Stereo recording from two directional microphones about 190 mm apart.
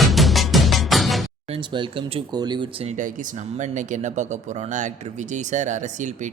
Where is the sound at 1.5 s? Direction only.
30° right (ahead or behind).